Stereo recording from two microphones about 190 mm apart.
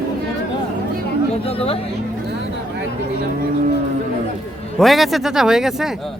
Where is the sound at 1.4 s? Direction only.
30° left (ahead or behind).